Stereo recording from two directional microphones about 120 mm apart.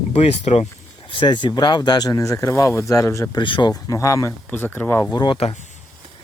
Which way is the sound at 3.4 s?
40° left (ahead or behind).